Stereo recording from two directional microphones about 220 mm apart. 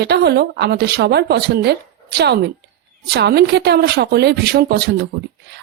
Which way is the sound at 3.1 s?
50° right (ahead or behind).